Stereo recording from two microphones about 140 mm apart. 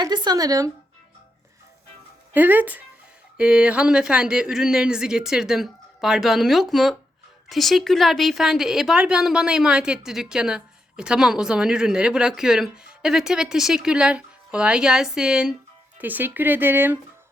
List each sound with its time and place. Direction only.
0.0 s speech: 30° right (ahead or behind)
2.3 s a woman's voice: 15° right (ahead or behind)